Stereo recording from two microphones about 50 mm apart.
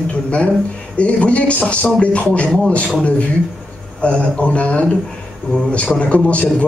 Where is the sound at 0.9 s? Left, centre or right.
Left.